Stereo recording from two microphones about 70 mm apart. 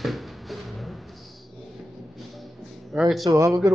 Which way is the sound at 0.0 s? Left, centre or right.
Centre.